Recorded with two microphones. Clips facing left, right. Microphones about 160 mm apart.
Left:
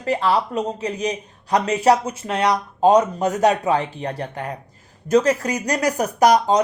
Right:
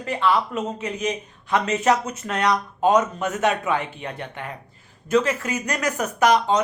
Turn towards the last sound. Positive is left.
turn(degrees=35)  # may be behind; listen again after turning